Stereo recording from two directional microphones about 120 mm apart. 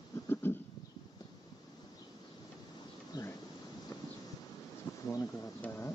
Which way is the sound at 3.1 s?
35° left (ahead or behind).